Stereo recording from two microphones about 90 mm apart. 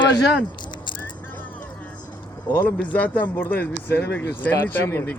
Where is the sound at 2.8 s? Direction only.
15° left (ahead or behind).